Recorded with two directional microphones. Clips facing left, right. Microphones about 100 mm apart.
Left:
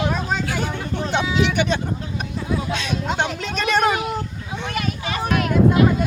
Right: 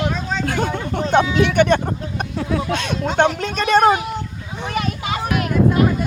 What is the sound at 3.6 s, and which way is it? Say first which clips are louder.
Speech: right 5 dB; 40° right (ahead or behind).